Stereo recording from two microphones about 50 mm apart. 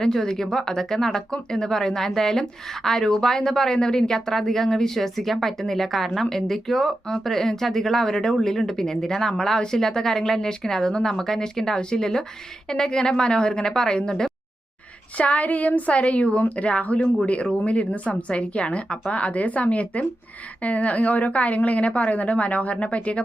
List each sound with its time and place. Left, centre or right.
0.0 s speech: centre
15.2 s speech: left